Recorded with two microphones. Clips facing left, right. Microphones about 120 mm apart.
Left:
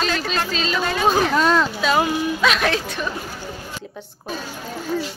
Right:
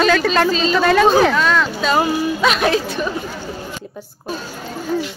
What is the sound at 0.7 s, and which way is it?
Speech, 85° right.